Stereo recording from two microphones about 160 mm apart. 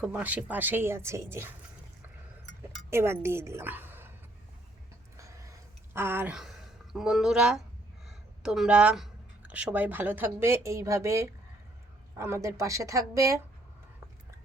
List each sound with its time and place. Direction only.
0.0 s speech: 10° right (ahead or behind)
2.9 s a woman's voice: 15° right (ahead or behind)
5.1 s a sound: 20° right (ahead or behind)
6.9 s speech: 5° right (ahead or behind); by 13.4 s 20° right (ahead or behind)